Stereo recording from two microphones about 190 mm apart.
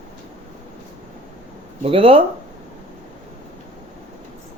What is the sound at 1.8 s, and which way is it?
Speech, 30° right (ahead or behind).